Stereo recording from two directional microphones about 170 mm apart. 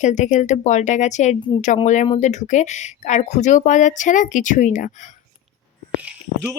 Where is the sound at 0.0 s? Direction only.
45° left (ahead or behind).